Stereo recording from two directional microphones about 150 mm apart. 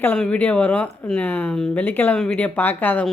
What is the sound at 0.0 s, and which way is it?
Speech, 10° left (ahead or behind).